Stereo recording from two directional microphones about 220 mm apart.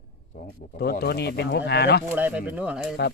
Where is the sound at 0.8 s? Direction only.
45° left (ahead or behind).